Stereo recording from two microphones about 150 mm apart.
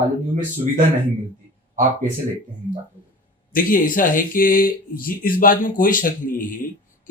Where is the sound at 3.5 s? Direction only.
65° left (ahead or behind).